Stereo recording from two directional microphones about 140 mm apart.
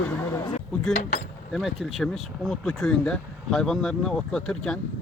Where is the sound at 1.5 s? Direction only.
Centre (ahead or behind).